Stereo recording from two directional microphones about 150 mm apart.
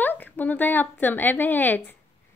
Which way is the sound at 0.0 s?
10° left (ahead or behind).